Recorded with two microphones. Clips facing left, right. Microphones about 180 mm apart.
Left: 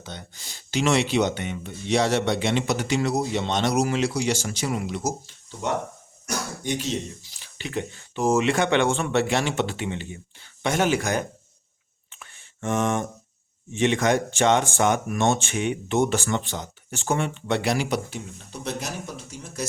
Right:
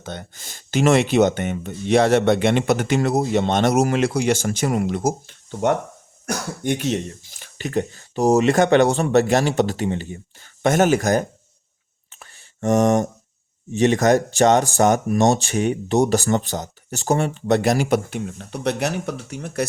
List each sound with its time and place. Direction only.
0.0 s speech: 50° right (ahead or behind)
12.1 s a sound: 40° right (ahead or behind)
13.7 s speech: 40° right (ahead or behind); by 19.6 s 65° right (ahead or behind)